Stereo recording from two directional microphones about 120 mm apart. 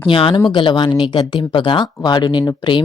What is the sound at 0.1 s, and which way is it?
Speech, 45° left (ahead or behind).